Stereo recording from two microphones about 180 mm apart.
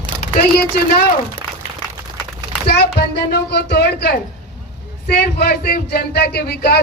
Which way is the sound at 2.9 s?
65° left (ahead or behind).